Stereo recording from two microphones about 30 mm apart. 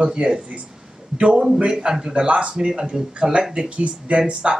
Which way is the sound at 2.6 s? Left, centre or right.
Right.